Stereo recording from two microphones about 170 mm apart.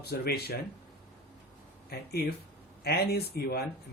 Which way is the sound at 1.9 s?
70° left (ahead or behind).